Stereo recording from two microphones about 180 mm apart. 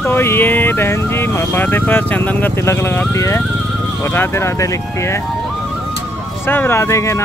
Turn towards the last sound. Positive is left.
turn(degrees=15)  # may be behind; listen again after turning